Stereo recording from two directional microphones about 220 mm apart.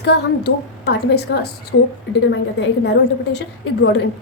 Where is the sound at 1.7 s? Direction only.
60° left (ahead or behind).